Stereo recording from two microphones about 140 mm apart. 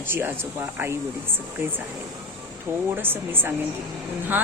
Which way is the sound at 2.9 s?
15° right (ahead or behind).